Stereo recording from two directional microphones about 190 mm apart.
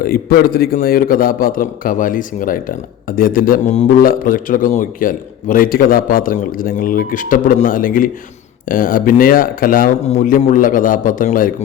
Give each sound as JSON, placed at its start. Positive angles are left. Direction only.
{"t": 0.0, "sound": "a man's voice", "side_deg": 50}